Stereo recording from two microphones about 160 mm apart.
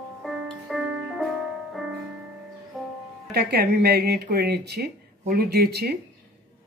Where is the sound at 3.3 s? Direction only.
85° right.